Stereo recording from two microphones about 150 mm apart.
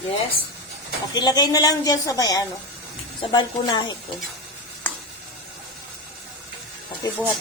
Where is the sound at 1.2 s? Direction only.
30° left (ahead or behind).